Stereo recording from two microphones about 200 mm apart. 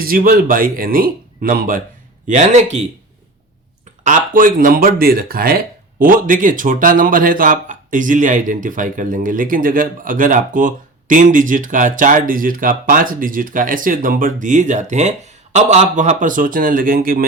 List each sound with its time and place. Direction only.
0.0 s a man's voice: 45° right (ahead or behind)
4.0 s speech: 40° right (ahead or behind)